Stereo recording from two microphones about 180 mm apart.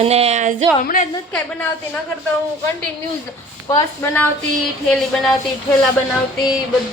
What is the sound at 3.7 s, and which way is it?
Speech, 15° left (ahead or behind).